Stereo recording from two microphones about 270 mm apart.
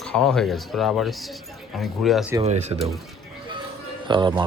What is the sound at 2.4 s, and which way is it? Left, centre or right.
Speech, right.